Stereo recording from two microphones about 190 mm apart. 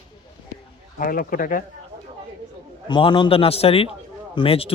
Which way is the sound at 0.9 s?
50° left (ahead or behind).